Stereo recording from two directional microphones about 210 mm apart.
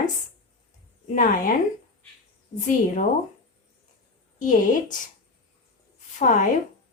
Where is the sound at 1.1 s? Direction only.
40° left (ahead or behind).